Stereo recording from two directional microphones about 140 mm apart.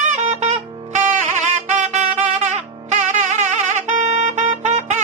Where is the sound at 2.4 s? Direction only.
55° right (ahead or behind).